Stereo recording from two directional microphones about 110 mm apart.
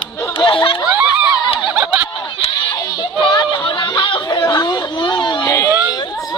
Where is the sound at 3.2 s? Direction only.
40° left (ahead or behind).